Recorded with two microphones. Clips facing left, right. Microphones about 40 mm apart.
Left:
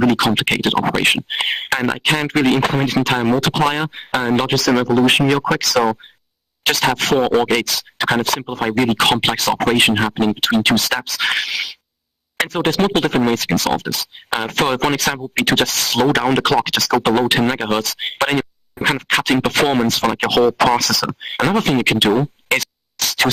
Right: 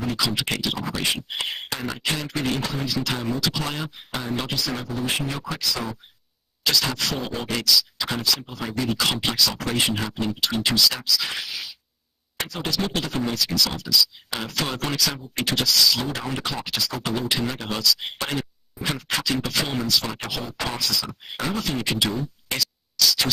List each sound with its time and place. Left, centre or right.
0.2 s speech: left
4.6 s speech: left
6.6 s speech: left
12.4 s speech: left
16.1 s speech: left
17.0 s speech: left
20.2 s speech: left